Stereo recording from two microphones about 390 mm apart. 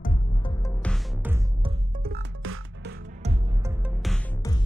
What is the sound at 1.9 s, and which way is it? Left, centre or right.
Music, right.